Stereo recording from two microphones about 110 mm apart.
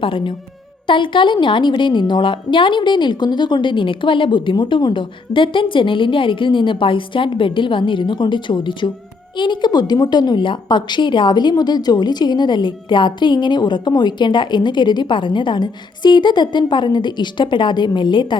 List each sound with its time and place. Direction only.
0.0 s a woman's voice: 50° left (ahead or behind)